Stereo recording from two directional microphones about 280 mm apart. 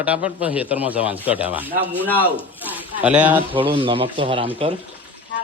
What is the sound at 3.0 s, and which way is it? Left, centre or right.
Speech, centre.